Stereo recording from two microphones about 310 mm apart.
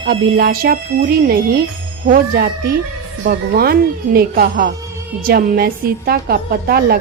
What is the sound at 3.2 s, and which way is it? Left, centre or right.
A woman's voice, right.